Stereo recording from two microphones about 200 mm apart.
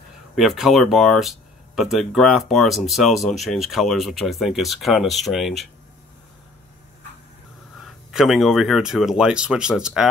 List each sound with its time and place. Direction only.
0.4 s speech: centre (ahead or behind)
7.8 s speech: centre (ahead or behind)